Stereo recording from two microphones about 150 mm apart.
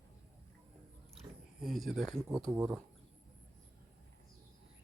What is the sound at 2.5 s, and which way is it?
Speech, 10° right (ahead or behind).